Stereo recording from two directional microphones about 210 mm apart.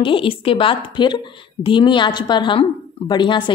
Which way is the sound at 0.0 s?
25° left (ahead or behind).